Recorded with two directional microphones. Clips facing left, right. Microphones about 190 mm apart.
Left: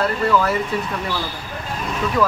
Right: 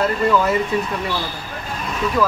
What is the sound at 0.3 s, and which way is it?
Speech, 20° right (ahead or behind).